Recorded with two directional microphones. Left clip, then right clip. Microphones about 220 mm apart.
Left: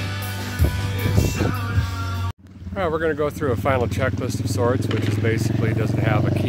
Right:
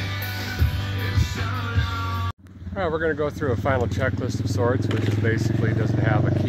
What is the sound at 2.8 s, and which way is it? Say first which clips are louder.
Speech: left 2 dB; 5° left (ahead or behind).